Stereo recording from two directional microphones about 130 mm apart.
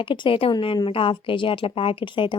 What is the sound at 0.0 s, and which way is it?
A woman's voice, 40° left (ahead or behind).